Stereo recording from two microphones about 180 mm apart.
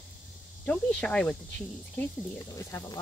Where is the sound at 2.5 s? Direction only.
20° left (ahead or behind).